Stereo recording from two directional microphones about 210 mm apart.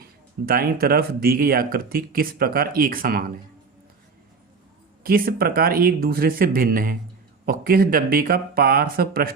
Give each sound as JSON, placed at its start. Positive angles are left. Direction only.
{"t": 0.4, "sound": "speech", "side_deg": -45}
{"t": 5.0, "sound": "speech", "side_deg": -45}